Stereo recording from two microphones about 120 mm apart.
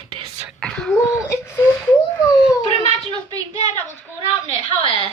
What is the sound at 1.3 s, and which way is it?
Speech, 20° left (ahead or behind).